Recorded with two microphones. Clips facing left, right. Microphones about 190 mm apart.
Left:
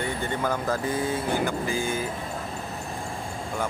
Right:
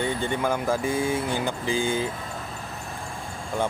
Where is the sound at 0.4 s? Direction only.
10° right (ahead or behind).